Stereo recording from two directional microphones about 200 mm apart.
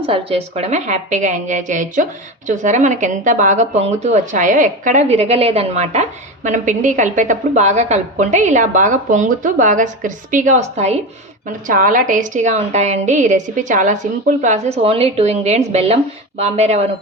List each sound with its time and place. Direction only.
0.0 s speech: 30° right (ahead or behind)